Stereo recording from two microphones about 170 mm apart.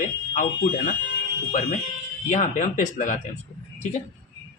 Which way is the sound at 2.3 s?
45° left (ahead or behind).